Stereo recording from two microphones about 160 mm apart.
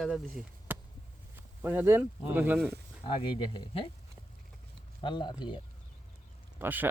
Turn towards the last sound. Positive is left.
turn(degrees=-10)  # may be behind; listen again after turning